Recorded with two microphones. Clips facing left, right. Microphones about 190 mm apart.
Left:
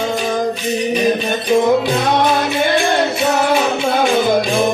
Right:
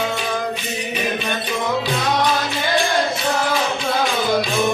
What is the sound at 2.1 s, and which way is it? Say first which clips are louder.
Music: left 5 dB; 55° left (ahead or behind).